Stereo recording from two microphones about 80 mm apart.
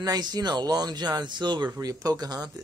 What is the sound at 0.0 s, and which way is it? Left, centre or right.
Speech, right.